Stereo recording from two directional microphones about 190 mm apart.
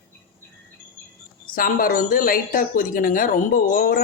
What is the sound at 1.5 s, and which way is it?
Speech, 50° left (ahead or behind).